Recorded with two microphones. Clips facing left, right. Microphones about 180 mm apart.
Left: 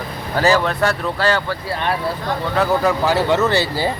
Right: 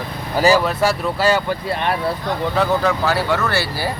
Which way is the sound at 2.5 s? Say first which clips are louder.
Left 2 dB; 5° left (ahead or behind).